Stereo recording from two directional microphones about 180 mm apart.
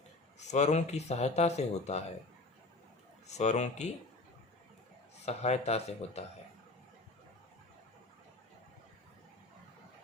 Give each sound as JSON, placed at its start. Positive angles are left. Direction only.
{"t": 0.3, "sound": "speech", "side_deg": 40}
{"t": 3.2, "sound": "speech", "side_deg": 40}
{"t": 5.2, "sound": "speech", "side_deg": 35}